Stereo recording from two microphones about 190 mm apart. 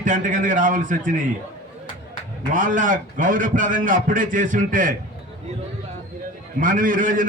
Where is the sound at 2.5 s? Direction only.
45° right (ahead or behind).